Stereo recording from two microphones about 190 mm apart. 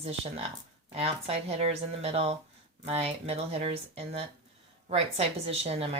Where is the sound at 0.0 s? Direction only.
30° right (ahead or behind).